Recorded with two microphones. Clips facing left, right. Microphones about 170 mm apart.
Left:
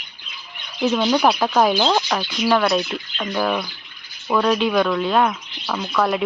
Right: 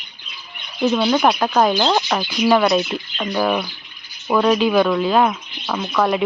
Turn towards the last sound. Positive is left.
turn(degrees=-5)  # may be behind; listen again after turning